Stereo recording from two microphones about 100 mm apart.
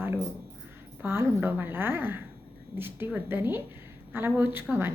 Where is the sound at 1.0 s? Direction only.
25° right (ahead or behind).